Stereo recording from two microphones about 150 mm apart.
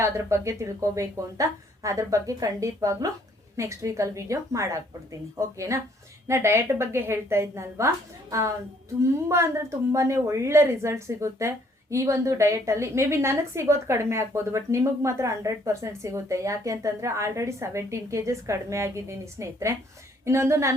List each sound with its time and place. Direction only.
0.0 s a woman's voice: 20° right (ahead or behind)